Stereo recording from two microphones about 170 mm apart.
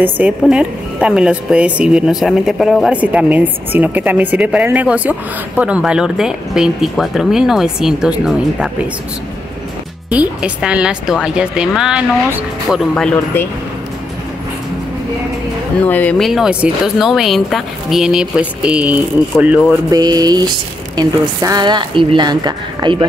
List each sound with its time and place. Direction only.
0.0 s speech: 5° right (ahead or behind)
10.1 s speech: 5° right (ahead or behind); by 13.5 s 10° left (ahead or behind)
15.8 s speech: 10° left (ahead or behind); by 19.6 s 10° right (ahead or behind)
19.9 s a sound: 25° right (ahead or behind)